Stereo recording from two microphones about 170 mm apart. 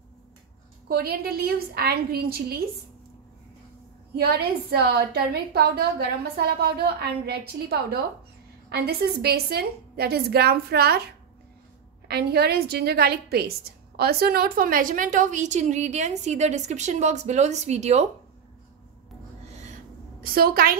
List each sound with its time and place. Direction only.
0.8 s a woman's voice: 65° right (ahead or behind)
4.2 s a woman's voice: 70° right (ahead or behind)
12.1 s a woman's voice: 70° right (ahead or behind); by 18.0 s 40° right (ahead or behind)
19.4 s owl: 40° right (ahead or behind)
20.2 s a woman's voice: 60° right (ahead or behind)